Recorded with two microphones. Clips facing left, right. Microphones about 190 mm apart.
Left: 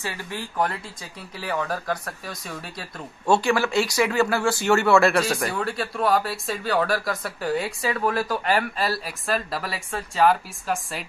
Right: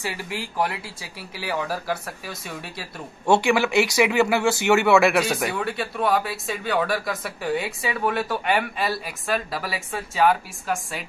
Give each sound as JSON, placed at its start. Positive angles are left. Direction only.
{"t": 0.0, "sound": "a man's voice", "side_deg": -15}
{"t": 3.4, "sound": "a man's voice", "side_deg": -15}
{"t": 5.2, "sound": "speech", "side_deg": 0}